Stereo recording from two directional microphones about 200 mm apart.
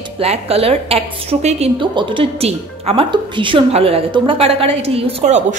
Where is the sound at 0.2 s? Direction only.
30° right (ahead or behind).